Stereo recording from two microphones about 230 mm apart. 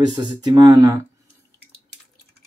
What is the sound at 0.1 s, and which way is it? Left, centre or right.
Speech, centre.